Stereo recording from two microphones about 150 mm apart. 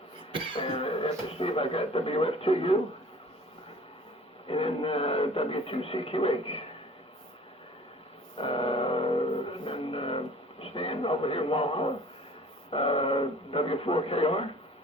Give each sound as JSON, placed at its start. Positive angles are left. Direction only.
{"t": 0.5, "sound": "speech", "side_deg": 35}
{"t": 4.4, "sound": "speech", "side_deg": 40}
{"t": 8.4, "sound": "music", "side_deg": 40}
{"t": 9.5, "sound": "vehicle", "side_deg": 40}
{"t": 10.6, "sound": "speech", "side_deg": 40}